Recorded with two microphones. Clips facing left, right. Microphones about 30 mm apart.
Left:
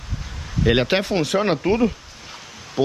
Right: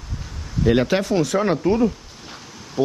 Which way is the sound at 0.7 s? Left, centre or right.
Left.